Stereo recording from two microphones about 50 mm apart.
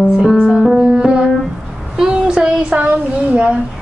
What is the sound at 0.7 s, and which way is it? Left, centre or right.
Music, centre.